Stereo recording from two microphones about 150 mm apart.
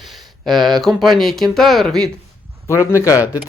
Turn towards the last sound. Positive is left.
turn(degrees=20)  # may be behind; listen again after turning